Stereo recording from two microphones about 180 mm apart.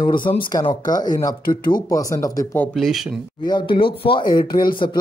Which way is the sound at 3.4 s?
25° left (ahead or behind).